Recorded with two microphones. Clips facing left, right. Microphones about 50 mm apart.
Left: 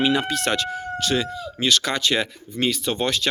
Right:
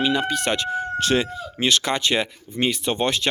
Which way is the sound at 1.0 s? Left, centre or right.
Right.